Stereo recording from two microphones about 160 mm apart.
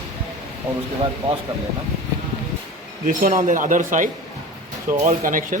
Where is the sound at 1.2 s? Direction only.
35° right (ahead or behind).